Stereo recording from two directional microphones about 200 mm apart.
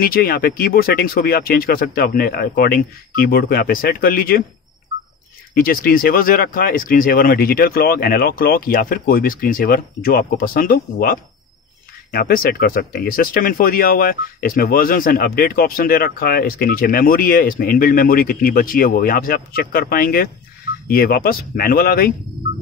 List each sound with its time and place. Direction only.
0.0 s speech: 50° left (ahead or behind)
5.5 s speech: 45° left (ahead or behind)